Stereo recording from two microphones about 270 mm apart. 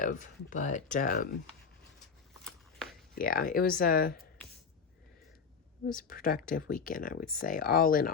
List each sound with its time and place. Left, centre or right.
0.0 s speech: left
3.2 s speech: left
6.0 s speech: left